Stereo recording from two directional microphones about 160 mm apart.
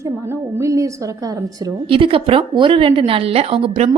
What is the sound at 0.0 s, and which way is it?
A woman's voice, 20° right (ahead or behind).